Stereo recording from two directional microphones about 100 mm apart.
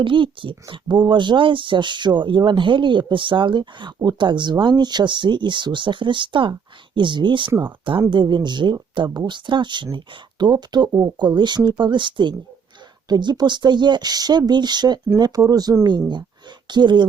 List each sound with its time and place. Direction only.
0.0 s speech: 60° right (ahead or behind)